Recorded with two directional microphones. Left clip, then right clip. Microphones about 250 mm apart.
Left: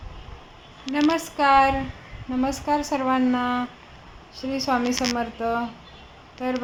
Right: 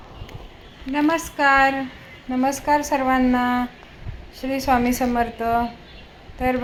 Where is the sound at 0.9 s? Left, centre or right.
Centre.